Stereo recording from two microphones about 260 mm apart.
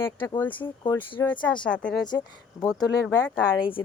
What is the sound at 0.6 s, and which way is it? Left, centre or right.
Speech, centre.